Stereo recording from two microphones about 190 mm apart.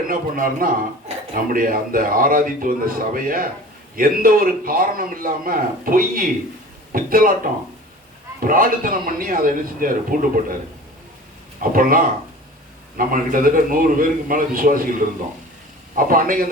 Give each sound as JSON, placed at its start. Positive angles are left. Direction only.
{"t": 0.1, "sound": "speech", "side_deg": -45}
{"t": 8.4, "sound": "speech", "side_deg": -45}
{"t": 11.6, "sound": "speech", "side_deg": -50}
{"t": 16.0, "sound": "speech", "side_deg": -45}